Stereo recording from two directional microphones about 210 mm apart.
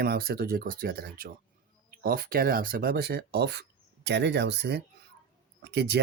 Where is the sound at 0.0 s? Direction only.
50° right (ahead or behind).